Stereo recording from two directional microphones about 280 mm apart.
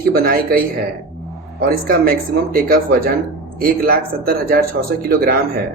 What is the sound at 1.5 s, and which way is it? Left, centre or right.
Speech, right.